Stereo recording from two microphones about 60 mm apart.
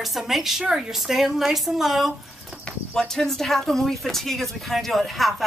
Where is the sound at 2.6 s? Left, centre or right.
Centre.